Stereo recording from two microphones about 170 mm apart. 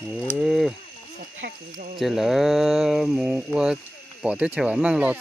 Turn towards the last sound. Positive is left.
turn(degrees=-10)  # may be behind; listen again after turning